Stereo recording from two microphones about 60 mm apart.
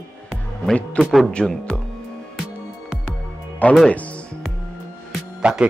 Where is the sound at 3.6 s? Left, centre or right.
Left.